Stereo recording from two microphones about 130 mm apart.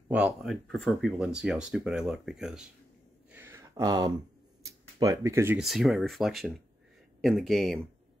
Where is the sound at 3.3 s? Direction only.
20° right (ahead or behind).